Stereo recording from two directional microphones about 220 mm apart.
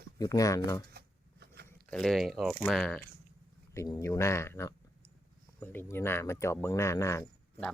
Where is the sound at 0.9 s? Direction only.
45° right (ahead or behind).